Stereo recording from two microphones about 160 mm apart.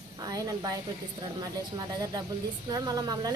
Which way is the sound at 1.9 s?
25° right (ahead or behind).